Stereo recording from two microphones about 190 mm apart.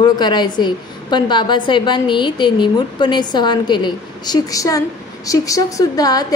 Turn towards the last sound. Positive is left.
turn(degrees=20)  # may be behind; listen again after turning